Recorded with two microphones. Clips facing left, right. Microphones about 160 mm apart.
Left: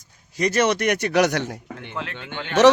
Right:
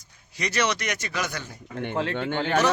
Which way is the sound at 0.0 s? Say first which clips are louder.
Left 9 dB; 45° left (ahead or behind).